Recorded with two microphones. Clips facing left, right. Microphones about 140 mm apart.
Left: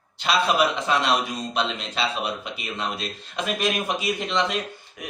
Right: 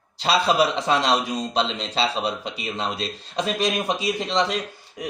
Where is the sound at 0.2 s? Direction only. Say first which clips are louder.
Right 2 dB; 30° right (ahead or behind).